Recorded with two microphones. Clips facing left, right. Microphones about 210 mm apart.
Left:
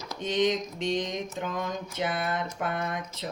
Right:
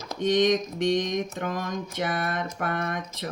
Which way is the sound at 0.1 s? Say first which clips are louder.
Right 4 dB; 70° right (ahead or behind).